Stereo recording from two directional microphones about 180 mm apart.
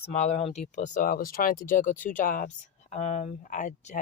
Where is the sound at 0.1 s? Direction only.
40° left (ahead or behind).